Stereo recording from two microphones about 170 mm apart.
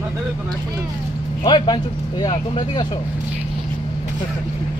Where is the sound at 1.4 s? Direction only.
25° left (ahead or behind).